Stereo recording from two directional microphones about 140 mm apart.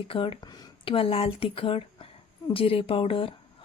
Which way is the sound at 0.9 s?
40° left (ahead or behind).